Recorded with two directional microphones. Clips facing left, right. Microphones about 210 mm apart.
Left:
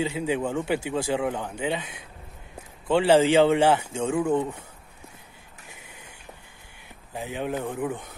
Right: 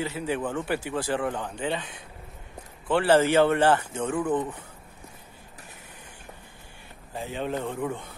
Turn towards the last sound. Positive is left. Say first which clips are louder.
# left 1 dB
turn(degrees=15)  # may be behind; listen again after turning